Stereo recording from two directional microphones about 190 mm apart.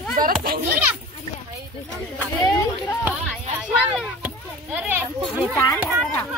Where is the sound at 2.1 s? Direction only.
10° left (ahead or behind).